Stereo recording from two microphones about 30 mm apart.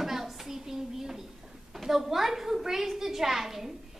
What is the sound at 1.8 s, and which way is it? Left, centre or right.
A child's voice, centre.